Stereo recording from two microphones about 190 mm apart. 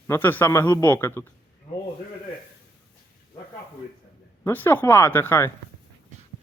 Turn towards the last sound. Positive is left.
turn(degrees=15)  # may be behind; listen again after turning